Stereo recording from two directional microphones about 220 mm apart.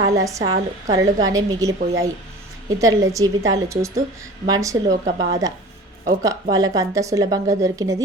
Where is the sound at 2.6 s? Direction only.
15° right (ahead or behind).